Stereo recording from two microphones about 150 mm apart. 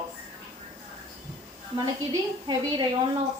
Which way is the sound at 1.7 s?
25° right (ahead or behind).